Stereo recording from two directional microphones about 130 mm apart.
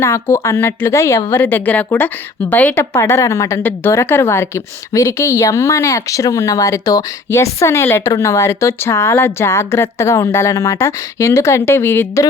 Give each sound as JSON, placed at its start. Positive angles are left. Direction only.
{"t": 0.0, "sound": "a woman's voice", "side_deg": 20}